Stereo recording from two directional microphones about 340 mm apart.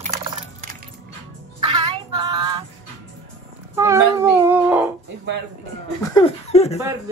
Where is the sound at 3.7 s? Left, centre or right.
Centre.